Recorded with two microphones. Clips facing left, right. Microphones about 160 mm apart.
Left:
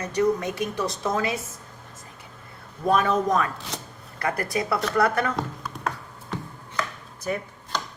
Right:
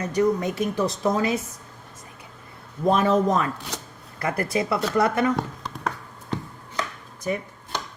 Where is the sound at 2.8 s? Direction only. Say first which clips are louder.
Right 2 dB; 25° right (ahead or behind).